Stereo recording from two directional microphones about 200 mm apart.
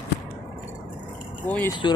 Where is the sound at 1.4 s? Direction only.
10° left (ahead or behind).